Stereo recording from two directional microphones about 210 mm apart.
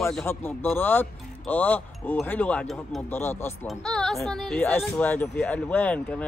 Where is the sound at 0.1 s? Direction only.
10° left (ahead or behind).